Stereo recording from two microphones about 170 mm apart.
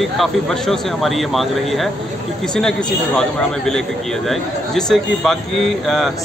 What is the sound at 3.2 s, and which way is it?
Speech, 5° left (ahead or behind).